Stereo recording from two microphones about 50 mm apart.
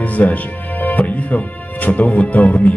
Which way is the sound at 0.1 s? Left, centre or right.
Left.